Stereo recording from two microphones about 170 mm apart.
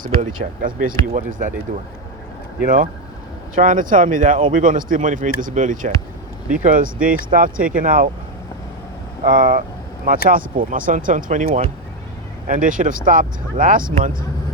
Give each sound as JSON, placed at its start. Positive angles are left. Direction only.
{"t": 0.6, "sound": "speech", "side_deg": -50}
{"t": 2.6, "sound": "speech", "side_deg": -50}
{"t": 9.2, "sound": "speech", "side_deg": -55}